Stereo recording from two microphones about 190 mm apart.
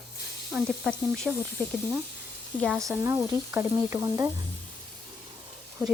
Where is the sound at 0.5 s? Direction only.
Centre (ahead or behind).